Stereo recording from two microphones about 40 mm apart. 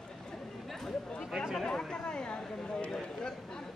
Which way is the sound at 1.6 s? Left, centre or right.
Centre.